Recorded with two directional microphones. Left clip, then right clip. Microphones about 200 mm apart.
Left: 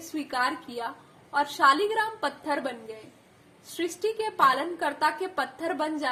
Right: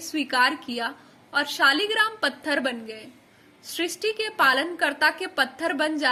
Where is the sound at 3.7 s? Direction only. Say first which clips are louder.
Right 2 dB; 25° right (ahead or behind).